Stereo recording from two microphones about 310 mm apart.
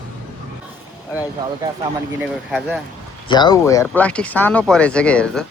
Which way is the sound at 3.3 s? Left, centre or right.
Centre.